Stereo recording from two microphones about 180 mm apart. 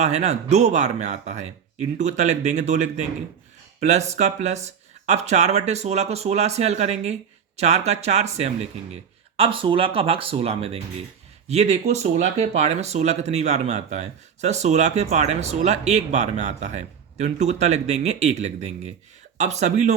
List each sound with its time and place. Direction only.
0.0 s speech: 40° right (ahead or behind)